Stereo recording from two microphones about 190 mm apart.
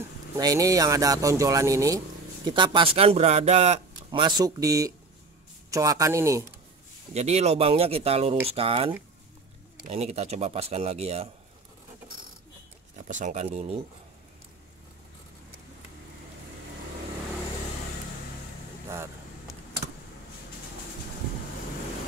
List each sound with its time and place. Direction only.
0.4 s speech: 20° right (ahead or behind); by 4.2 s 35° right (ahead or behind)
4.2 s speech: 20° right (ahead or behind)
7.2 s speech: 35° right (ahead or behind)
13.1 s speech: 40° right (ahead or behind)